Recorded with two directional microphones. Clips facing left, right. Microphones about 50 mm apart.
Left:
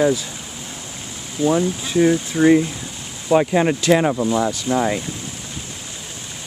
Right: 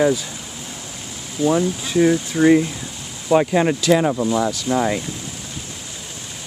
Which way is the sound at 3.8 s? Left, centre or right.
Left.